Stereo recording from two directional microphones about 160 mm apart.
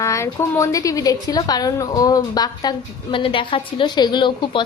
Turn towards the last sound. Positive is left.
turn(degrees=30)  # may be behind; listen again after turning